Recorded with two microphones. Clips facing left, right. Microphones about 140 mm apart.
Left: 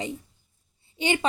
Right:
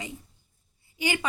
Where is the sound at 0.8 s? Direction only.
25° left (ahead or behind).